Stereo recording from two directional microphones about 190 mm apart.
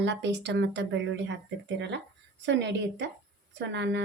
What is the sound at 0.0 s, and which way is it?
A woman's voice, 70° right (ahead or behind).